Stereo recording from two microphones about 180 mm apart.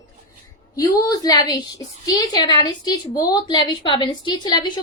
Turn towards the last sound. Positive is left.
turn(degrees=25)  # may be behind; listen again after turning